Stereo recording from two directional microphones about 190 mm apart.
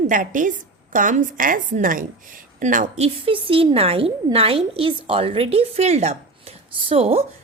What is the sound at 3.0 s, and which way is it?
A woman's voice, 30° right (ahead or behind).